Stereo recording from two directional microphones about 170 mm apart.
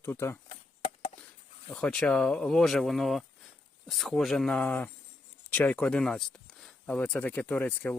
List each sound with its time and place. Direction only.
0.0 s speech: 15° left (ahead or behind)
1.7 s speech: 5° left (ahead or behind)